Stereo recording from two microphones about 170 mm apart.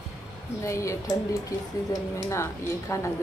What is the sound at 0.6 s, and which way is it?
Speech, 15° left (ahead or behind).